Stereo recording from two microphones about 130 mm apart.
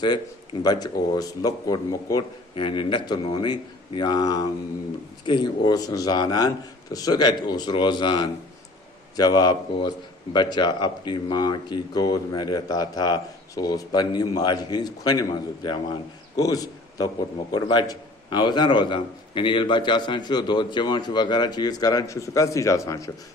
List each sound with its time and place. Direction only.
0.0 s a man's voice: 35° left (ahead or behind)
2.6 s a man's voice: 40° left (ahead or behind)
16.4 s a man's voice: 30° left (ahead or behind)